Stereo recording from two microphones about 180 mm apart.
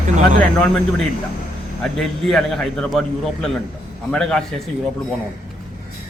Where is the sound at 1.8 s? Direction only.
Centre (ahead or behind).